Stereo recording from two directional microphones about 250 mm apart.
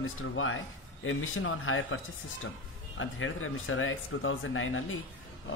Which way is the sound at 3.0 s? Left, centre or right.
Left.